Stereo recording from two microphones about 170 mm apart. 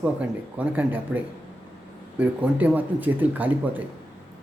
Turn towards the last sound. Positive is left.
turn(degrees=-10)  # may be behind; listen again after turning